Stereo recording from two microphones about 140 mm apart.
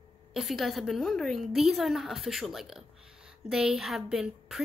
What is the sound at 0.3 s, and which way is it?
A woman's voice, centre (ahead or behind).